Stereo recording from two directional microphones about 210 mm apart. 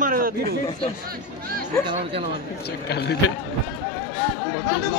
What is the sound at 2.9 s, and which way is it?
Speech, 50° left (ahead or behind).